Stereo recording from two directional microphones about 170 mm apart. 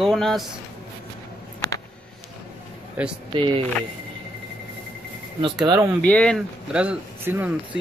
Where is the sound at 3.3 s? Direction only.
30° right (ahead or behind).